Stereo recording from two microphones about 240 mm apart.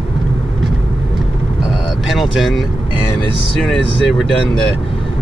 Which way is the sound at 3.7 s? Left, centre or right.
Centre.